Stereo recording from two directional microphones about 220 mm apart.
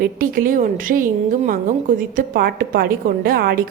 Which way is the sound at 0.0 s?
40° right (ahead or behind).